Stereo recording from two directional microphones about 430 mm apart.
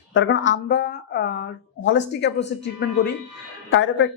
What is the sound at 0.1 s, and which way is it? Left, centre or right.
Speech, left.